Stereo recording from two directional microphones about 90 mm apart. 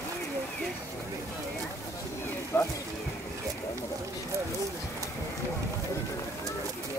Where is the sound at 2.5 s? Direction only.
25° left (ahead or behind).